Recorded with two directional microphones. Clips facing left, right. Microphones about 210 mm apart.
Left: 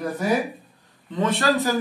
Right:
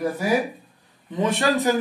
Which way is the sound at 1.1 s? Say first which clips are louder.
Even; 15° right (ahead or behind).